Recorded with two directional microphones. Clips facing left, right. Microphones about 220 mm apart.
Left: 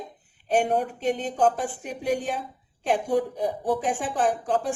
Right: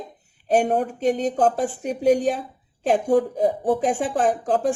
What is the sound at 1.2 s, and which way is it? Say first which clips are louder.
A woman's voice: right 3 dB; 40° right (ahead or behind).